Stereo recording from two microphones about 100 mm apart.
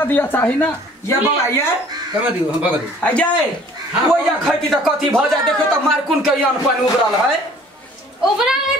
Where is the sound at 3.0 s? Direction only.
10° left (ahead or behind).